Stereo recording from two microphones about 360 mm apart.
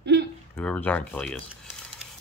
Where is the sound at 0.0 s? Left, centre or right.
Right.